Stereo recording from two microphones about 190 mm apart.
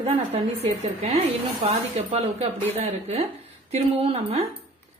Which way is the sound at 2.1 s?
35° right (ahead or behind).